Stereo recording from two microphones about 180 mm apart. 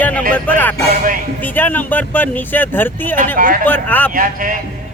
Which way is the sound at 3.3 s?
50° right (ahead or behind).